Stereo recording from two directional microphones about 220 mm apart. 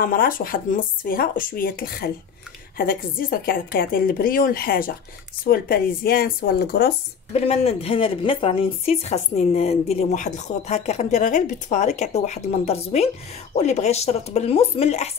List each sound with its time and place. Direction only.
0.0 s speech: 40° left (ahead or behind)
7.3 s speech: 30° left (ahead or behind)